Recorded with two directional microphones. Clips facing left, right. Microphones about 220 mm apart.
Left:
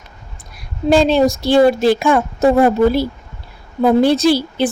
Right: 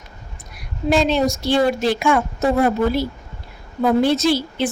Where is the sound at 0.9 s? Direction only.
30° left (ahead or behind).